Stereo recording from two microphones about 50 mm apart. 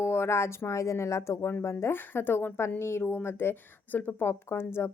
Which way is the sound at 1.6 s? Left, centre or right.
Left.